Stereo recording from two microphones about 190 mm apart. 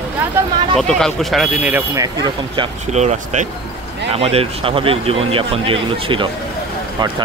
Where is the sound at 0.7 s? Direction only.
Centre (ahead or behind).